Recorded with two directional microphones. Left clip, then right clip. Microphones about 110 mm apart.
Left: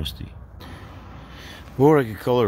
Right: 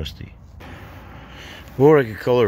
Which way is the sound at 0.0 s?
5° right (ahead or behind).